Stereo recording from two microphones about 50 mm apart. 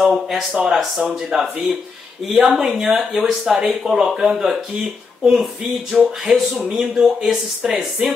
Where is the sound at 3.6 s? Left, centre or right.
Centre.